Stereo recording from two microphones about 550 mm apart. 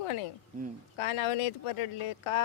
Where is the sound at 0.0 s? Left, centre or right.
Left.